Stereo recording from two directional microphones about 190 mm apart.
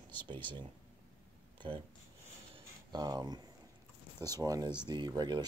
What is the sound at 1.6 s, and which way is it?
Speech, 25° right (ahead or behind).